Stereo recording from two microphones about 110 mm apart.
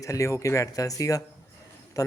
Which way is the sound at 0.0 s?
30° left (ahead or behind).